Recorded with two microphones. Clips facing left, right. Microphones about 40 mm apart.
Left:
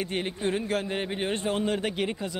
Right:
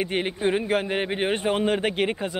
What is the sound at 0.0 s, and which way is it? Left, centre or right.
Speech, right.